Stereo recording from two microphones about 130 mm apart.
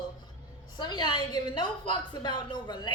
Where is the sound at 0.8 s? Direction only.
35° left (ahead or behind).